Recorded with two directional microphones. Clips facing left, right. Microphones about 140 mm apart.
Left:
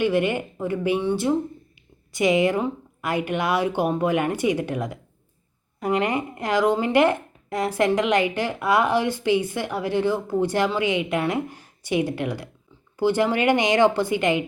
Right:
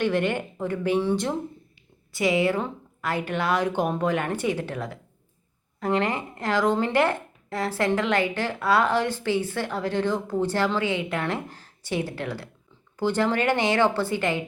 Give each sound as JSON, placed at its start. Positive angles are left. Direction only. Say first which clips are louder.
{"t": 0.0, "sound": "speech", "louder": "left 3 dB", "side_deg": 10}
{"t": 2.1, "sound": "speech", "louder": "left 3 dB", "side_deg": 20}